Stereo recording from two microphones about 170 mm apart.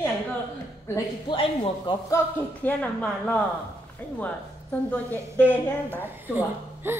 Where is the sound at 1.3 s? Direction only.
30° left (ahead or behind).